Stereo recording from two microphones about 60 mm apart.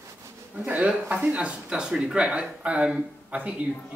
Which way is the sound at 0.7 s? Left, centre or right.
Right.